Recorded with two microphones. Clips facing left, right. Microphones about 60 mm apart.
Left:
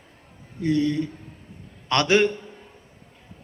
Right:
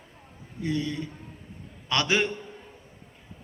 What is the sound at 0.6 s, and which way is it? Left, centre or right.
A man's voice, left.